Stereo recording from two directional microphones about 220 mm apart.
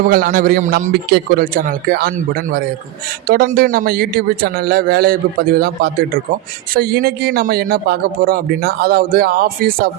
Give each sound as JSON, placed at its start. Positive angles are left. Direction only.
{"t": 0.0, "sound": "a man's voice", "side_deg": -35}